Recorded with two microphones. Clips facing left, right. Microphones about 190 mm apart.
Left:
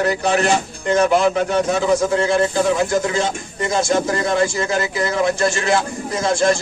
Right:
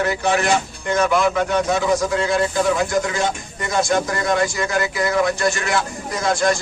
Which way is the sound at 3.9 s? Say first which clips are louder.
Left 1 dB; 25° left (ahead or behind).